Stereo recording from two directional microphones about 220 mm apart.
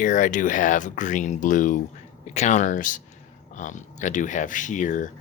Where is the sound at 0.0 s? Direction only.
35° left (ahead or behind).